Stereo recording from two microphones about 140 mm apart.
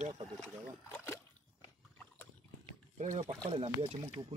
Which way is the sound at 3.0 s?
60° right (ahead or behind).